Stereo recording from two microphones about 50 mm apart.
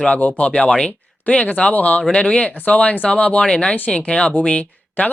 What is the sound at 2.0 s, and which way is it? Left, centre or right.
Speech, centre.